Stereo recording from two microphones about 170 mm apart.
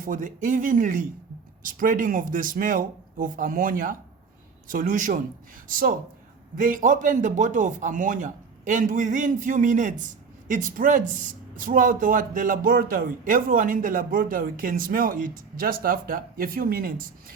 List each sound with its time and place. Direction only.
0.0 s a man's voice: 50° right (ahead or behind)